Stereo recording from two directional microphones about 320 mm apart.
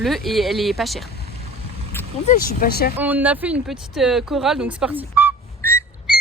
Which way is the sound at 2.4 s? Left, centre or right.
Left.